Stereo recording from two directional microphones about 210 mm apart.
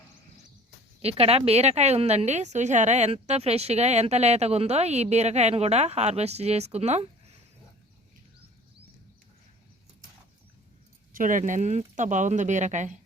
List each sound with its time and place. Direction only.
1.0 s a woman's voice: 30° right (ahead or behind)
11.1 s a woman's voice: 40° right (ahead or behind)